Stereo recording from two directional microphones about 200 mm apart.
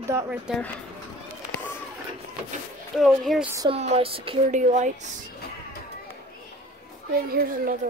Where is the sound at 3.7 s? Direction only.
30° right (ahead or behind).